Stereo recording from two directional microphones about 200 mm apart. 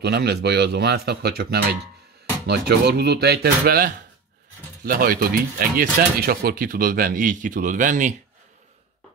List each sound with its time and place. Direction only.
0.0 s speech: 55° right (ahead or behind)